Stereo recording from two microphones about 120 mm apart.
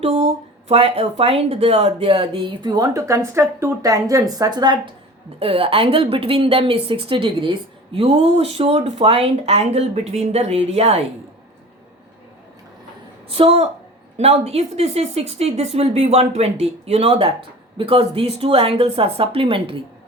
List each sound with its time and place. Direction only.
0.0 s a woman's voice: 60° right (ahead or behind); by 4.8 s 35° right (ahead or behind)
5.4 s a woman's voice: 50° right (ahead or behind)
7.9 s speech: 55° right (ahead or behind)
13.3 s a woman's voice: 55° right (ahead or behind)